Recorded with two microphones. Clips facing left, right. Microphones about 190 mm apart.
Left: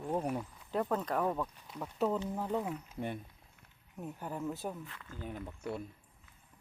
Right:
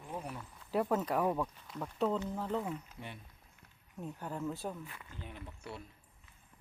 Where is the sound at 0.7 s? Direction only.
5° right (ahead or behind).